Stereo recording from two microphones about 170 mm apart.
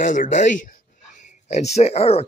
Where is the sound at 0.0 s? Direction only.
50° left (ahead or behind).